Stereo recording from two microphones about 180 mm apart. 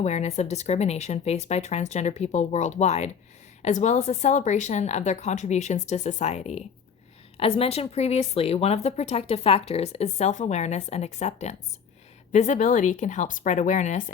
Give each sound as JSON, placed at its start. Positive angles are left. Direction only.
{"t": 0.0, "sound": "a woman's voice", "side_deg": 40}